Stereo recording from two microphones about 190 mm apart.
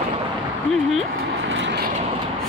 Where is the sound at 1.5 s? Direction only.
70° right (ahead or behind).